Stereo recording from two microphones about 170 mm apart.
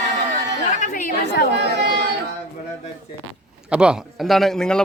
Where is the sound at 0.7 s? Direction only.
45° left (ahead or behind).